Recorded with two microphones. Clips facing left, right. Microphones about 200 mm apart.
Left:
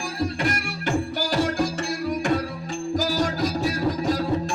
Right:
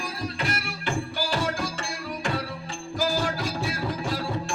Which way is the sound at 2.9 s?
40° left (ahead or behind).